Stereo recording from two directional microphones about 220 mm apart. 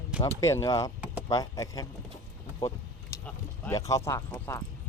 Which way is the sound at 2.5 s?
20° left (ahead or behind).